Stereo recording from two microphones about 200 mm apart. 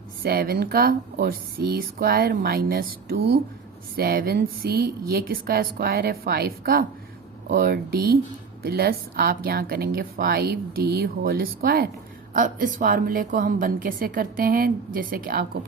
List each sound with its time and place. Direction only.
0.2 s a woman's voice: 50° right (ahead or behind)